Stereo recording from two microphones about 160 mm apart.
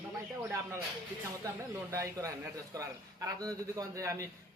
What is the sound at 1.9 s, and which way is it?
A man's voice, 20° right (ahead or behind).